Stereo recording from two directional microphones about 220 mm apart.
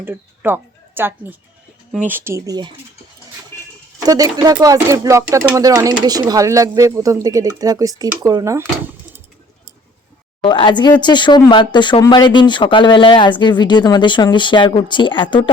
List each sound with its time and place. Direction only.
0.0 s speech: 10° right (ahead or behind)
3.5 s a sound: 10° left (ahead or behind)
4.0 s speech: 15° right (ahead or behind)
10.4 s speech: 20° left (ahead or behind)